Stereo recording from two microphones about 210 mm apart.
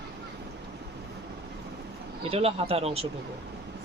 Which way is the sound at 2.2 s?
25° right (ahead or behind).